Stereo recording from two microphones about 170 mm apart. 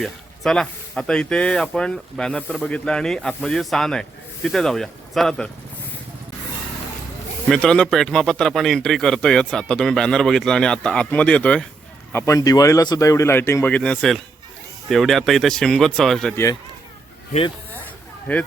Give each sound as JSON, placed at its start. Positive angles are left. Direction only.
{"t": 0.0, "sound": "a man's voice", "side_deg": 0}
{"t": 7.5, "sound": "a man's voice", "side_deg": 5}
{"t": 12.1, "sound": "a man's voice", "side_deg": 20}
{"t": 18.3, "sound": "speech", "side_deg": 10}